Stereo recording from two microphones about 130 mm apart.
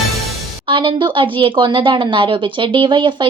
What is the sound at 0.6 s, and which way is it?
A woman's voice, 40° right (ahead or behind).